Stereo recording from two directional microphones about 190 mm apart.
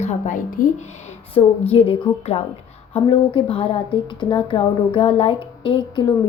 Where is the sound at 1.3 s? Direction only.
30° left (ahead or behind).